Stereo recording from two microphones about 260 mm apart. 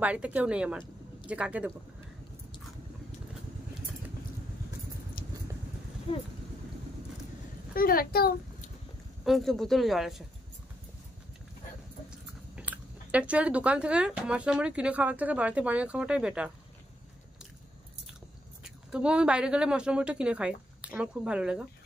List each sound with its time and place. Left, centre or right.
0.0 s speech: centre
7.7 s a child's voice: left
9.2 s speech: centre
12.5 s speech: centre
18.6 s a woman's voice: centre